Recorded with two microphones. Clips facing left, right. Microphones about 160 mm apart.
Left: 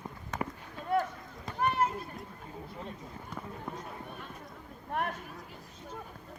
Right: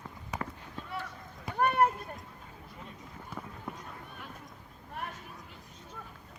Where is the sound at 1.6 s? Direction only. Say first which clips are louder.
Right 3 dB; 60° right (ahead or behind).